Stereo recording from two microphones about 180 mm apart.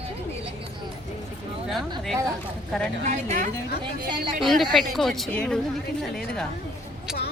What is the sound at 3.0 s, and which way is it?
Speech, 40° right (ahead or behind).